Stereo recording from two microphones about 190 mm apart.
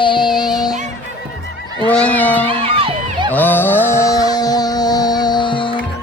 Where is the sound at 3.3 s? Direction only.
10° left (ahead or behind); by 5.7 s 25° left (ahead or behind).